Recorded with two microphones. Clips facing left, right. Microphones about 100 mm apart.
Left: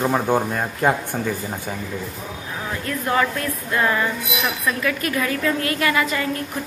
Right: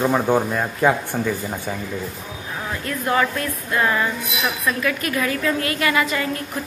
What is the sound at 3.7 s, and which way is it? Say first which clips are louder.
A woman's voice: even; 15° right (ahead or behind).